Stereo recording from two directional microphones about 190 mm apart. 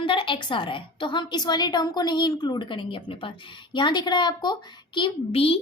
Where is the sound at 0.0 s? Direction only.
25° left (ahead or behind).